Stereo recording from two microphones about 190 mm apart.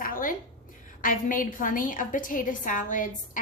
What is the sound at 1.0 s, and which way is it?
A woman's voice, 45° left (ahead or behind).